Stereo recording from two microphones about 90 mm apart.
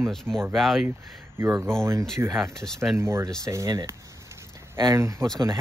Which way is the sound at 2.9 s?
30° right (ahead or behind).